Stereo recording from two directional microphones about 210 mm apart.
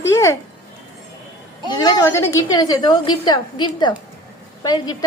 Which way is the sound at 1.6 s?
20° left (ahead or behind).